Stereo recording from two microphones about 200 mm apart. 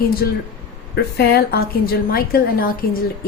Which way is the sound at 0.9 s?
55° left (ahead or behind).